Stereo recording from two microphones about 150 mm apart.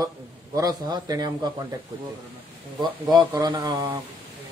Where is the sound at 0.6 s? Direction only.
25° right (ahead or behind).